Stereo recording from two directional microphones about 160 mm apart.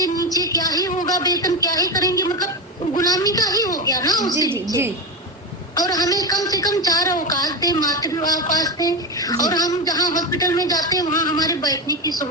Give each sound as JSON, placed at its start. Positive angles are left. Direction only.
{"t": 0.0, "sound": "a sound", "side_deg": 25}
{"t": 1.0, "sound": "speech", "side_deg": 25}
{"t": 5.7, "sound": "speech", "side_deg": 25}